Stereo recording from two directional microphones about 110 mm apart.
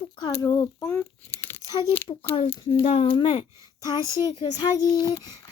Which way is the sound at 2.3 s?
50° left (ahead or behind).